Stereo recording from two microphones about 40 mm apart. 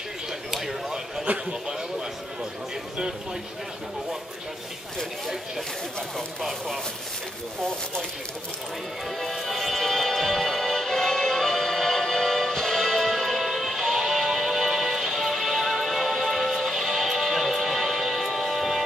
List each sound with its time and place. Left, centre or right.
0.5 s a sound: centre
1.5 s a man's voice: centre
9.2 s music: centre